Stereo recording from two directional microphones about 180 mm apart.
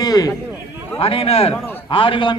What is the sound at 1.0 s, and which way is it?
A man's voice, 30° left (ahead or behind).